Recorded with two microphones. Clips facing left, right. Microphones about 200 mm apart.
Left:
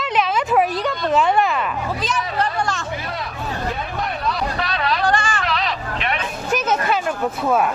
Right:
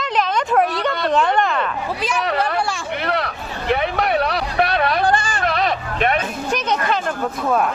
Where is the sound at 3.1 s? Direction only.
70° right (ahead or behind); by 6.2 s 50° right (ahead or behind).